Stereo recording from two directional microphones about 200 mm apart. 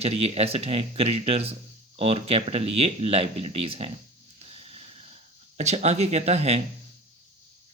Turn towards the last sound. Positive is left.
turn(degrees=-35)  # may be behind; listen again after turning